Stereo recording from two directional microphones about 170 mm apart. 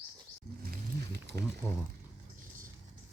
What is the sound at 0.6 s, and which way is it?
Wild animals, 65° right (ahead or behind).